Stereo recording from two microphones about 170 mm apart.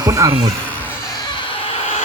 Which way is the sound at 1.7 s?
35° left (ahead or behind).